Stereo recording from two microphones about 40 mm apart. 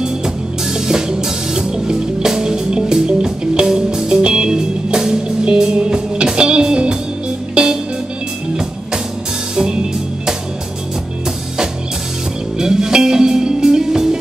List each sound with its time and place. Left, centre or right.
0.7 s music: centre
12.5 s music: centre